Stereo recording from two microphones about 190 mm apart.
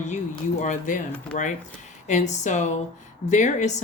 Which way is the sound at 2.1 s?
40° left (ahead or behind).